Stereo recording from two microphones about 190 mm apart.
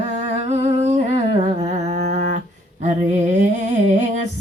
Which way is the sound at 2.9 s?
40° right (ahead or behind).